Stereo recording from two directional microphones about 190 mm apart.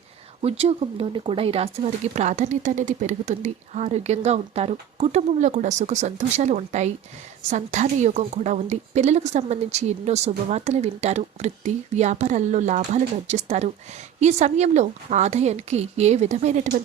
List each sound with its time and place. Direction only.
0.4 s speech: 30° right (ahead or behind)